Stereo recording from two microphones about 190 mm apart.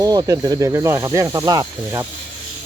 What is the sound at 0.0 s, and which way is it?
Speech, 20° right (ahead or behind).